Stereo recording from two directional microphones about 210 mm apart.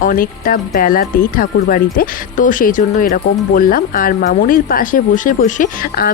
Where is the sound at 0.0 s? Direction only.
40° left (ahead or behind).